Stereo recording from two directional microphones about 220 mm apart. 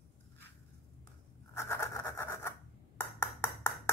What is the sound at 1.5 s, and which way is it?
Scratch, 10° left (ahead or behind).